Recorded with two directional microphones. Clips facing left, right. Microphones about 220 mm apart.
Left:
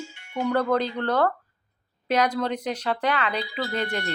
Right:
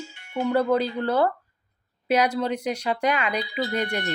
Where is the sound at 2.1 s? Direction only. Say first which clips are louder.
Right 1 dB; 10° right (ahead or behind).